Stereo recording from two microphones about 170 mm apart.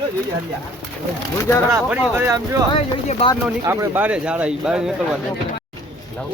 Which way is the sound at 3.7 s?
10° right (ahead or behind).